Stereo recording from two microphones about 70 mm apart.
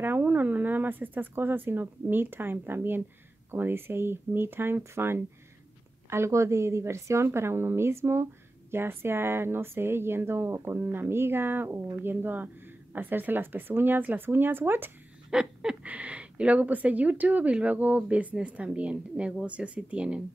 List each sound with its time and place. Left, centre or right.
0.0 s speech: right
15.3 s a woman's voice: centre